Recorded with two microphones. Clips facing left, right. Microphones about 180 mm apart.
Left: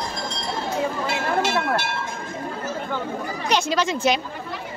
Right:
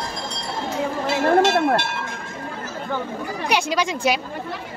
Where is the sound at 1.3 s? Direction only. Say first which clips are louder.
Right 6 dB; 45° right (ahead or behind).